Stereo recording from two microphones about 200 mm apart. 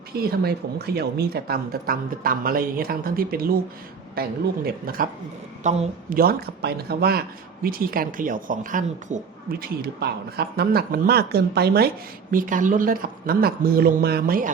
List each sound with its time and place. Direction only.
0.1 s speech: 50° right (ahead or behind)
12.3 s speech: 40° right (ahead or behind)